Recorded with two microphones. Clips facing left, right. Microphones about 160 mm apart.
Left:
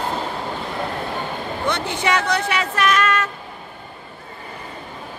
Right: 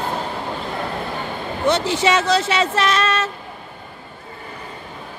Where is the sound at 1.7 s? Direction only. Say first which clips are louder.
Right 4 dB; 25° right (ahead or behind).